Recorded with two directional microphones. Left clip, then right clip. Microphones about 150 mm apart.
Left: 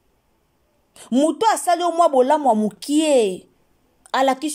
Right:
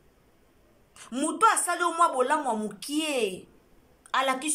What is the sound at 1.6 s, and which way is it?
Speech, 90° left.